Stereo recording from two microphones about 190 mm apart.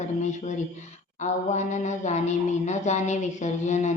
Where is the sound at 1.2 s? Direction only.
40° left (ahead or behind).